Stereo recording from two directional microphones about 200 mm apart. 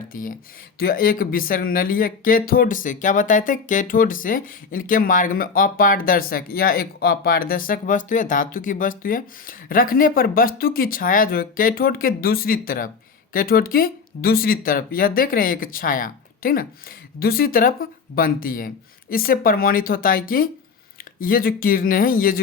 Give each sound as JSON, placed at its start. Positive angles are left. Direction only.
{"t": 0.1, "sound": "speech", "side_deg": 45}